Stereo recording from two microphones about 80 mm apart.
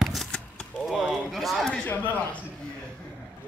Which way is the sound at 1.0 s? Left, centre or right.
Centre.